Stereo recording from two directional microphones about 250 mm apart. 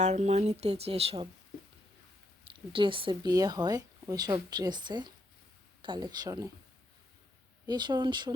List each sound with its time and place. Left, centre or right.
0.0 s speech: right
2.5 s speech: centre
7.7 s speech: centre